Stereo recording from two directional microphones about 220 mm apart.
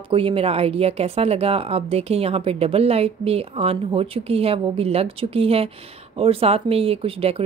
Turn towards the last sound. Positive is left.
turn(degrees=-25)  # may be behind; listen again after turning